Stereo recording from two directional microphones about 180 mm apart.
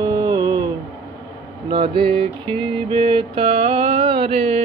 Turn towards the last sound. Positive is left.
turn(degrees=-35)  # may be behind; listen again after turning